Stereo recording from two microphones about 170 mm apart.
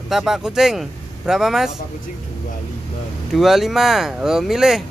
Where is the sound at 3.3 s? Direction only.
Centre (ahead or behind).